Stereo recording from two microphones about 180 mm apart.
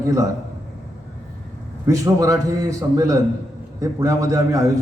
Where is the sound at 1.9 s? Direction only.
20° right (ahead or behind).